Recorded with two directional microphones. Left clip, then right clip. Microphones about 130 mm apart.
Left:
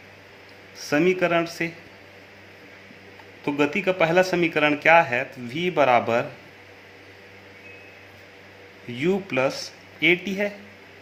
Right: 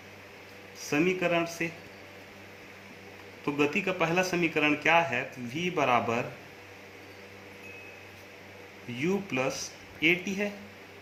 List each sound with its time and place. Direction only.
0.8 s a man's voice: 90° left
3.4 s a man's voice: 90° left
9.0 s a man's voice: 90° left